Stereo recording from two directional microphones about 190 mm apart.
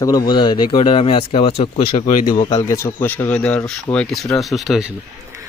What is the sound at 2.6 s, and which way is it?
Speech, 15° left (ahead or behind).